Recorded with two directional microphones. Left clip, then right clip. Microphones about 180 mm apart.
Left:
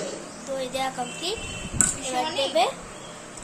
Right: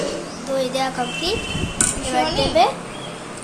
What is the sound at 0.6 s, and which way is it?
Speech, 15° left (ahead or behind).